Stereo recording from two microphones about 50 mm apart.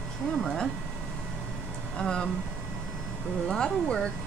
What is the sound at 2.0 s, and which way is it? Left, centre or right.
Speech, centre.